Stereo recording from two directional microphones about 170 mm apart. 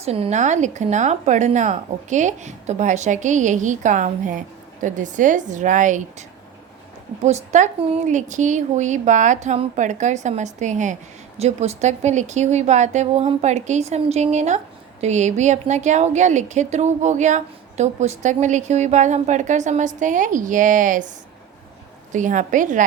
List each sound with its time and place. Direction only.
0.0 s speech: 40° right (ahead or behind)
22.1 s speech: 50° right (ahead or behind)